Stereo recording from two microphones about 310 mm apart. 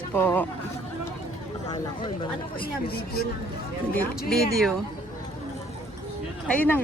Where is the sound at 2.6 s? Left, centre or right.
Left.